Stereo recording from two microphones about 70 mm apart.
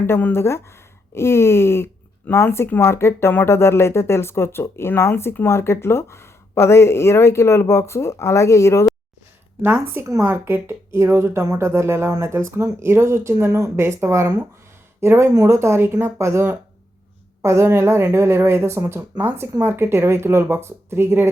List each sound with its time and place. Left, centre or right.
0.0 s speech: left
9.6 s speech: right
15.3 s speech: right